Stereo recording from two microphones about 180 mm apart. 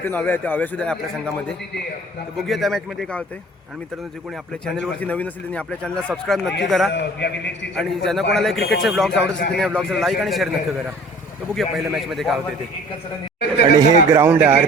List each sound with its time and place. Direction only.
0.0 s speech: 10° left (ahead or behind)
4.6 s speech: 5° left (ahead or behind)
7.0 s a man's voice: 70° left (ahead or behind)
7.8 s speech: centre (ahead or behind)
11.5 s speech: centre (ahead or behind)
13.7 s a man's voice: 15° right (ahead or behind)